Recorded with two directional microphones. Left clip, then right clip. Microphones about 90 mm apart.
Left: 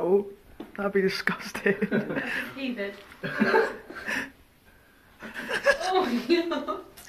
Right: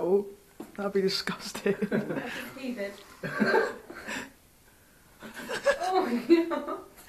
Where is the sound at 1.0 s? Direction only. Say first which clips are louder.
Left 3 dB; 10° right (ahead or behind).